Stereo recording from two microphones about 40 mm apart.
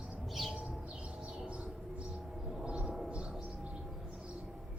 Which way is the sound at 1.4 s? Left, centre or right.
Right.